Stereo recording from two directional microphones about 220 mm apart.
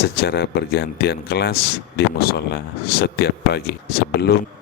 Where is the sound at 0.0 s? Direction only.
45° left (ahead or behind).